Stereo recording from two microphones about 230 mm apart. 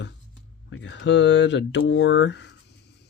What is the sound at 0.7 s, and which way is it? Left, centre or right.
Speech, left.